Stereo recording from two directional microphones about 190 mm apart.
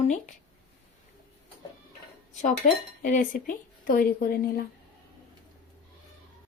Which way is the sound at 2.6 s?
45° left (ahead or behind).